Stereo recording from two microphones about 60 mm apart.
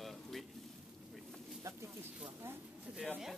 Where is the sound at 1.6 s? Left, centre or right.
Right.